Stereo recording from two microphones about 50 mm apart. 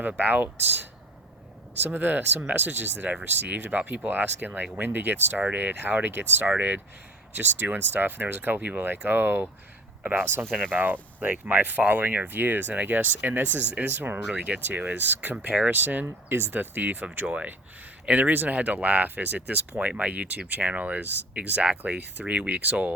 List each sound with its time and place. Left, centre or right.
0.2 s speech: right
1.8 s speech: right
6.6 s speech: right
10.7 s speech: right
13.9 s speech: right
14.3 s speech: right
16.3 s speech: right
16.6 s speech: right
17.2 s speech: right